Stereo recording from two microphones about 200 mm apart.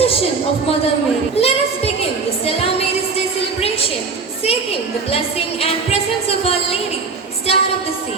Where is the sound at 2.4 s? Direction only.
30° left (ahead or behind).